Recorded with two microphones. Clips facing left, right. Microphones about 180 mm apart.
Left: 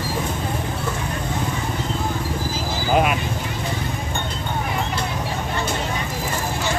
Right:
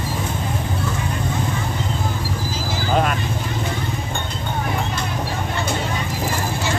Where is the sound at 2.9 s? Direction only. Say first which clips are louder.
Left 1 dB; 10° left (ahead or behind).